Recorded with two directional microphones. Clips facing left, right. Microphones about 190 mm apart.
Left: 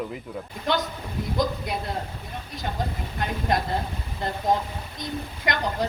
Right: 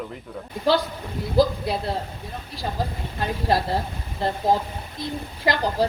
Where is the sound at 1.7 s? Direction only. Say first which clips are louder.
Right 4 dB; 30° right (ahead or behind).